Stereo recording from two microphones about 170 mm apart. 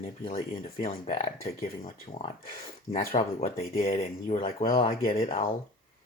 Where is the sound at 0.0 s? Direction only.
35° left (ahead or behind).